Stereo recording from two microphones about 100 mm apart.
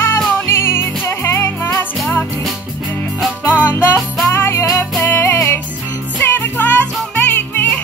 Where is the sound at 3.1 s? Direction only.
Centre (ahead or behind).